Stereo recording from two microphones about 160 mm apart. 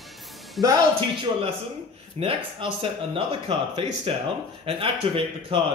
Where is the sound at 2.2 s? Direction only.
35° right (ahead or behind).